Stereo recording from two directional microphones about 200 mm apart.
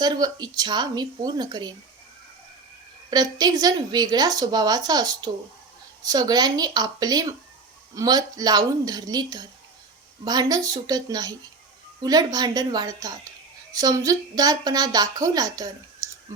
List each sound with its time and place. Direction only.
0.0 s a woman's voice: 20° right (ahead or behind)
3.1 s a woman's voice: 20° right (ahead or behind)